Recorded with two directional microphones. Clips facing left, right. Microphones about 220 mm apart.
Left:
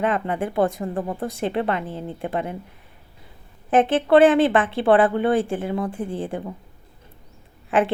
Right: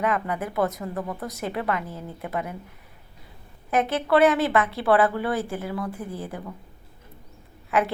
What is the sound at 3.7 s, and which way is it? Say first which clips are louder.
A woman's voice: left 5 dB; 30° left (ahead or behind).